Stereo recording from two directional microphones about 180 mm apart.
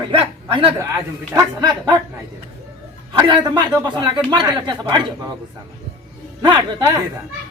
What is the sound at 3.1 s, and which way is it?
Speech, 25° right (ahead or behind).